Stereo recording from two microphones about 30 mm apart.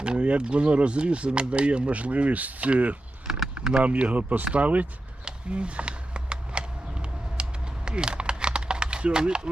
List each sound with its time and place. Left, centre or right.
0.0 s speech: right
3.2 s keys jangling: centre
3.8 s speech: right
5.2 s a sound: right
7.4 s creak: right
7.9 s typing: right